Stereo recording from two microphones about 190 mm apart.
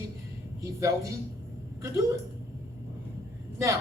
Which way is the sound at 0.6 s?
15° right (ahead or behind).